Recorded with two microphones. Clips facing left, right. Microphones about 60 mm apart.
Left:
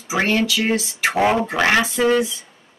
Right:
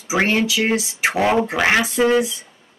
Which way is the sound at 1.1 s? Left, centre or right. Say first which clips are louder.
Even; centre.